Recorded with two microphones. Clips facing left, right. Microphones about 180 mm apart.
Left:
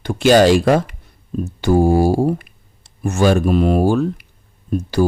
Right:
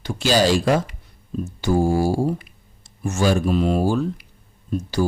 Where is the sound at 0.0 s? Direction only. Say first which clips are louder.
Left 7 dB; 55° left (ahead or behind).